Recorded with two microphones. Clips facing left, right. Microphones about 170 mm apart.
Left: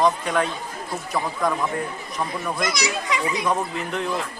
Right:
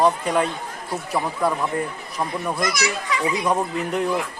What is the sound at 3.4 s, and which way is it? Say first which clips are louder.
Speech: right 2 dB; 10° right (ahead or behind).